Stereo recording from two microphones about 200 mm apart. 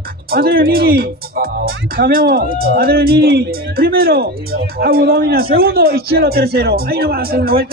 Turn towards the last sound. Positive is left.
turn(degrees=-50)  # may be behind; listen again after turning